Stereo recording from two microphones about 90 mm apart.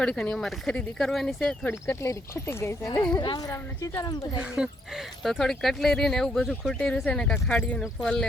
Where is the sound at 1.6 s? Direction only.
25° left (ahead or behind); by 4.2 s 45° left (ahead or behind).